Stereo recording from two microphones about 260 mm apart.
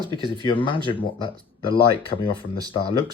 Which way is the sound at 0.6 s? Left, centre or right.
Centre.